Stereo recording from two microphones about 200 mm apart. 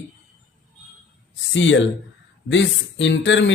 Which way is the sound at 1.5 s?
65° left (ahead or behind).